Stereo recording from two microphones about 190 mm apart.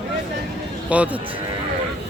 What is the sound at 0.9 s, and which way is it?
Speech, 5° right (ahead or behind).